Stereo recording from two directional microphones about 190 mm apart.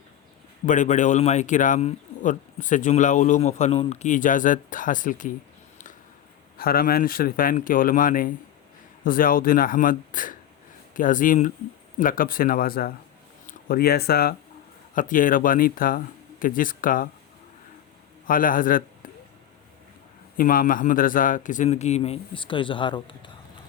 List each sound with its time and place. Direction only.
0.6 s speech: 40° left (ahead or behind)
6.6 s speech: 50° left (ahead or behind)
14.9 s speech: 45° left (ahead or behind)
18.3 s speech: 45° left (ahead or behind)
20.3 s speech: 50° left (ahead or behind); by 23.3 s 25° left (ahead or behind)